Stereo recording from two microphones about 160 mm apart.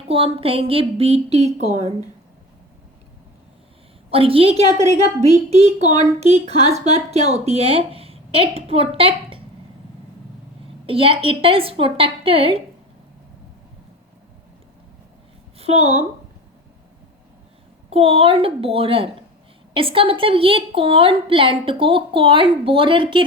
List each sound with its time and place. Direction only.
0.1 s a woman's voice: 35° right (ahead or behind)
4.1 s a woman's voice: 35° right (ahead or behind)
10.8 s a woman's voice: 35° right (ahead or behind)
15.5 s a sound: 40° right (ahead or behind)
17.9 s a woman's voice: 35° right (ahead or behind)